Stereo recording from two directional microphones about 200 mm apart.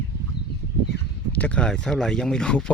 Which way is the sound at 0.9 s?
55° left (ahead or behind).